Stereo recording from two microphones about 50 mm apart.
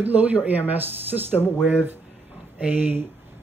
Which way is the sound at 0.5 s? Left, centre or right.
Right.